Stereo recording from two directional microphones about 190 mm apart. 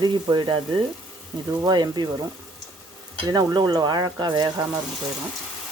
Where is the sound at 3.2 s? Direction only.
20° right (ahead or behind).